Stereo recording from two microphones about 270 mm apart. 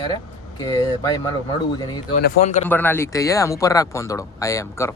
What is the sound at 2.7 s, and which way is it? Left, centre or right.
Speech, centre.